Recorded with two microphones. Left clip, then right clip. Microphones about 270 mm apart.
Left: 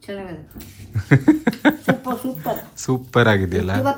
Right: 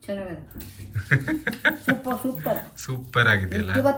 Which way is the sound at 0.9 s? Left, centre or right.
Centre.